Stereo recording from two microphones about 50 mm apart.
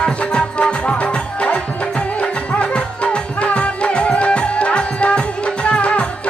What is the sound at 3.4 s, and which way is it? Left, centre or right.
Music, left.